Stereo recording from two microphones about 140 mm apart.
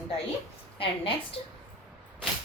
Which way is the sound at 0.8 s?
40° left (ahead or behind).